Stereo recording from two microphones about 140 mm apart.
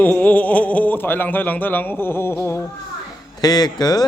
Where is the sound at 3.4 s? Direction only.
30° left (ahead or behind).